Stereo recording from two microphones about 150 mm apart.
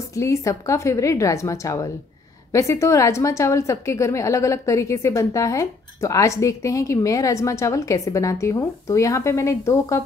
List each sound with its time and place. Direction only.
0.1 s a woman's voice: 20° left (ahead or behind)